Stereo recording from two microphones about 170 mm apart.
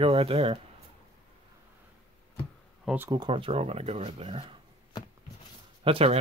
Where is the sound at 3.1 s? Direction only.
30° right (ahead or behind).